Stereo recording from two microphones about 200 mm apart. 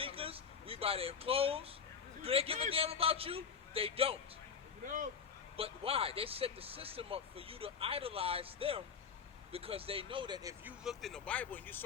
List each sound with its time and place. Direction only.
0.0 s a sound: 30° right (ahead or behind)
2.2 s speech: 30° right (ahead or behind)
5.5 s speech: 30° right (ahead or behind)
10.6 s speech: 5° right (ahead or behind)